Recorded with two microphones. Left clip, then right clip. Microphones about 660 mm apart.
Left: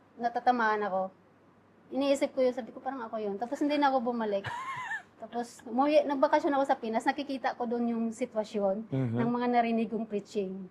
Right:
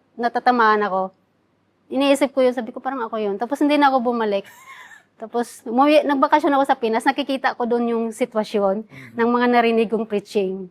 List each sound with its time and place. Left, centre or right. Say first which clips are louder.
0.2 s a woman's voice: right 10 dB; right